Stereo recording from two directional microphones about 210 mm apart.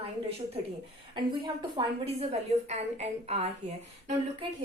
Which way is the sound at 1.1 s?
20° right (ahead or behind).